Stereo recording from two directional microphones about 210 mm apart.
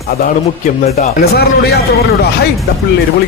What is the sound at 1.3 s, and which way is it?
Speech, 50° left (ahead or behind).